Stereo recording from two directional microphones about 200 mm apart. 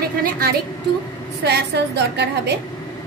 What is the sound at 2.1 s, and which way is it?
Speech, 55° right (ahead or behind).